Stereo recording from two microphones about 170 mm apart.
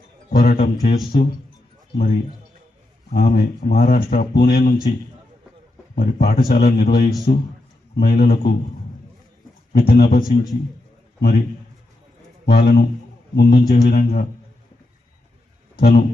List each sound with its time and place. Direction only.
0.3 s speech: 60° left (ahead or behind)
3.2 s speech: 65° left (ahead or behind)
6.0 s speech: 70° left (ahead or behind)
7.9 s speech: 65° left (ahead or behind)
9.7 s speech: 65° left (ahead or behind)
12.5 s speech: 60° left (ahead or behind)
15.7 s a man's voice: 65° left (ahead or behind)